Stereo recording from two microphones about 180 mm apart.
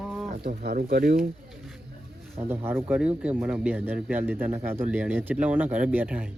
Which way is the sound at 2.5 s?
10° right (ahead or behind).